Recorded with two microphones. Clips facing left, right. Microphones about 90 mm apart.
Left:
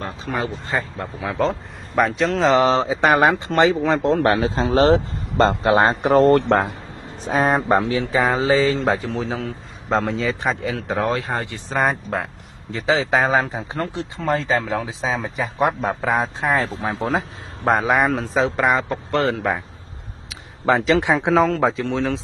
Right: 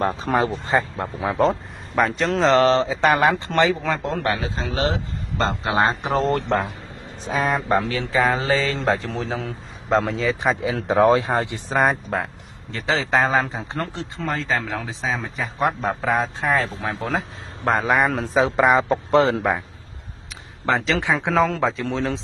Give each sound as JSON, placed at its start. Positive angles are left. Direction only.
{"t": 0.0, "sound": "a sound", "side_deg": -40}
{"t": 0.7, "sound": "speech", "side_deg": -20}
{"t": 2.0, "sound": "speech", "side_deg": 0}
{"t": 4.2, "sound": "speech", "side_deg": 35}
{"t": 7.2, "sound": "speech", "side_deg": 45}
{"t": 8.1, "sound": "speech", "side_deg": 10}
{"t": 11.0, "sound": "speech", "side_deg": -20}
{"t": 11.7, "sound": "speech", "side_deg": 0}
{"t": 16.2, "sound": "speech", "side_deg": 15}
{"t": 18.8, "sound": "a man's voice", "side_deg": -15}
{"t": 20.8, "sound": "speech", "side_deg": 20}
{"t": 21.3, "sound": "speech", "side_deg": 5}